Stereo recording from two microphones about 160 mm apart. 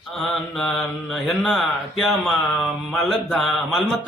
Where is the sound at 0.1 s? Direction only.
Centre (ahead or behind).